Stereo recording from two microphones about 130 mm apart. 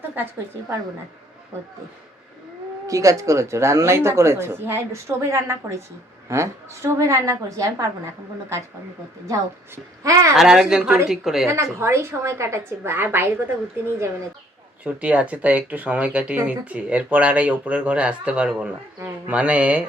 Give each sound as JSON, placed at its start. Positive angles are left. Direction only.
{"t": 2.8, "sound": "speech", "side_deg": -25}
{"t": 9.2, "sound": "speech", "side_deg": -25}
{"t": 10.3, "sound": "speech", "side_deg": -5}
{"t": 11.4, "sound": "speech", "side_deg": -20}
{"t": 14.8, "sound": "speech", "side_deg": -10}